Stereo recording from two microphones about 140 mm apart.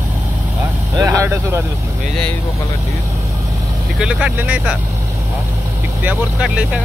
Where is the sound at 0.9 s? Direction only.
20° right (ahead or behind).